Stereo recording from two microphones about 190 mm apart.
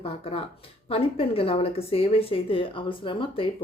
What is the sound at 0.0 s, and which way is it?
Speech, 30° left (ahead or behind).